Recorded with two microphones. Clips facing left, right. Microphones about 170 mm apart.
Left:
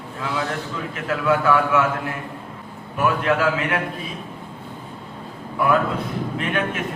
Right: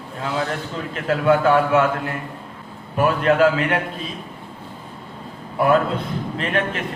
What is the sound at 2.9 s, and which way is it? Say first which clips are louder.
Speech: right 4 dB; 30° right (ahead or behind).